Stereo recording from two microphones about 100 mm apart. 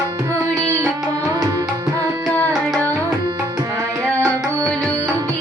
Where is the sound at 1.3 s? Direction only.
35° right (ahead or behind).